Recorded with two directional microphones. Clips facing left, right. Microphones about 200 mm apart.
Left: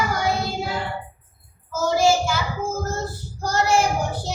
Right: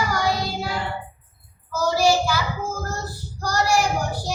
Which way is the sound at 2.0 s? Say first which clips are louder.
Left 1 dB; 25° left (ahead or behind).